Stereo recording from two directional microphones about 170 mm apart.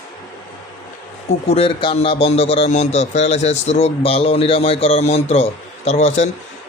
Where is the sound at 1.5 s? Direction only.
35° left (ahead or behind).